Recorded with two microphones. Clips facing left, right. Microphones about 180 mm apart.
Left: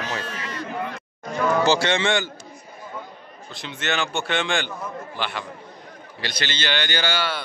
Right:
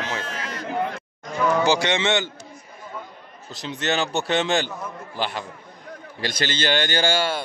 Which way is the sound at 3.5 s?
35° right (ahead or behind).